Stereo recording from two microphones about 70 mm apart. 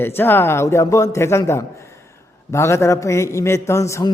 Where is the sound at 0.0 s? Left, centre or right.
Left.